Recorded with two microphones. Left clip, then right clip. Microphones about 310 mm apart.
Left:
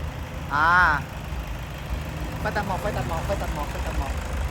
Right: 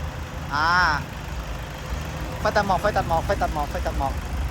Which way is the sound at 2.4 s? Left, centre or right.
Centre.